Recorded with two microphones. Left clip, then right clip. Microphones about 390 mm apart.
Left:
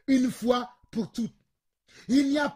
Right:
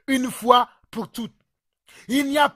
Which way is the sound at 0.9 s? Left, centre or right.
Right.